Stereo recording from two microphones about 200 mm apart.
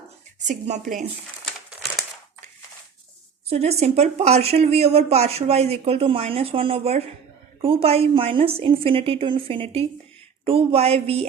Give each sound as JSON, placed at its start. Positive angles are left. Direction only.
{"t": 0.3, "sound": "speech", "side_deg": -35}
{"t": 3.4, "sound": "a woman's voice", "side_deg": -30}